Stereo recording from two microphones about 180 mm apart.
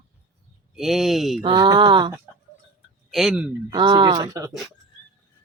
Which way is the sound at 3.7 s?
25° right (ahead or behind).